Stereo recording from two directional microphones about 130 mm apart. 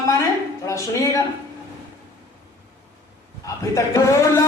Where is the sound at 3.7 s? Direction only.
25° left (ahead or behind).